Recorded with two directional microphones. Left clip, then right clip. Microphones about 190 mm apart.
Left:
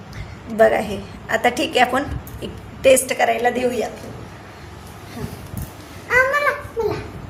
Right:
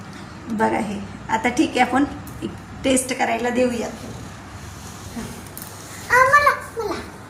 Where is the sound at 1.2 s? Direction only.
60° left (ahead or behind).